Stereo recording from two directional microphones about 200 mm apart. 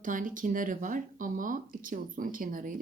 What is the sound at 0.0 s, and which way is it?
Speech, 40° right (ahead or behind).